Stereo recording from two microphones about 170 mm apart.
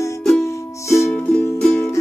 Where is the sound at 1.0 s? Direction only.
5° left (ahead or behind).